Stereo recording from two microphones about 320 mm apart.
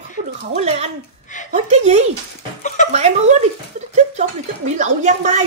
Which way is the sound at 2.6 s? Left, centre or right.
Left.